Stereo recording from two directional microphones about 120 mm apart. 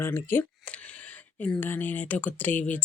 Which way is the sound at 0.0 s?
20° left (ahead or behind).